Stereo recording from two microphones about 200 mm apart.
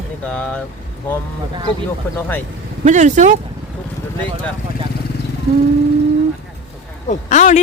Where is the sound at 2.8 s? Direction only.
35° right (ahead or behind).